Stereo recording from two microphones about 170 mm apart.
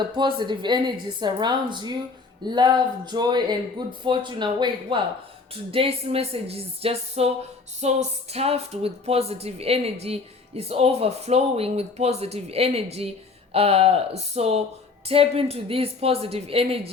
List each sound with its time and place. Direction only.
0.2 s a woman's voice: 25° right (ahead or behind)